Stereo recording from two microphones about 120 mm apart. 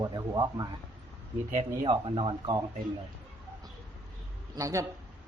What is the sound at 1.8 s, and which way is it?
Speech, 45° right (ahead or behind).